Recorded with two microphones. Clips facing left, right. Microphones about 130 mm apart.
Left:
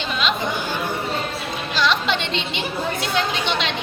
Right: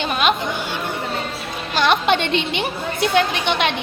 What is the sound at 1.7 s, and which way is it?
A woman's voice, 55° right (ahead or behind).